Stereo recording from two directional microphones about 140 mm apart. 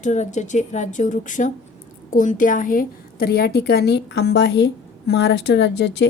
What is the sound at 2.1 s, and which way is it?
A woman's voice, 75° left (ahead or behind).